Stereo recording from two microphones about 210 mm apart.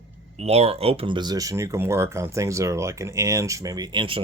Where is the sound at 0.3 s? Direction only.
30° right (ahead or behind).